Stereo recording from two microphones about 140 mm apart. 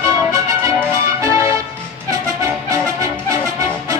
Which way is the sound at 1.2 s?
20° right (ahead or behind).